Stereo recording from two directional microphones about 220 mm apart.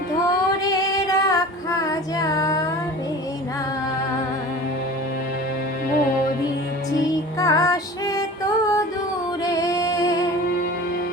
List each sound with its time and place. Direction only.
0.7 s music: 15° left (ahead or behind)
1.9 s female singing: 15° left (ahead or behind)
7.3 s music: 15° left (ahead or behind)